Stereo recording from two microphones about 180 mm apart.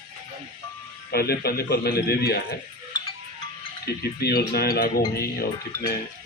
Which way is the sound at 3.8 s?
60° left (ahead or behind).